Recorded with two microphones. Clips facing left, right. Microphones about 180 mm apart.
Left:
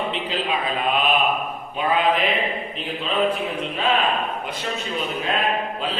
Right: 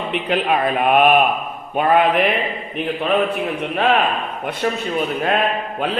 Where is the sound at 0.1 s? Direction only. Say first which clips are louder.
Right 6 dB; 60° right (ahead or behind).